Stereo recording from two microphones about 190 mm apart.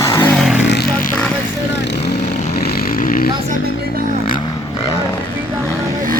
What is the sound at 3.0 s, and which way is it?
Vehicle, 45° left (ahead or behind).